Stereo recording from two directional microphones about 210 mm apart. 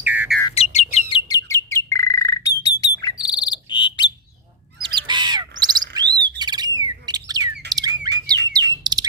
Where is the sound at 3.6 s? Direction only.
20° left (ahead or behind).